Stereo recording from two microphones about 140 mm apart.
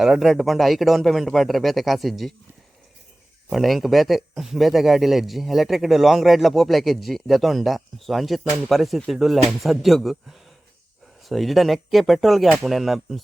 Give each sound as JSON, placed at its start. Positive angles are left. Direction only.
{"t": 0.0, "sound": "speech", "side_deg": 0}
{"t": 3.5, "sound": "speech", "side_deg": 0}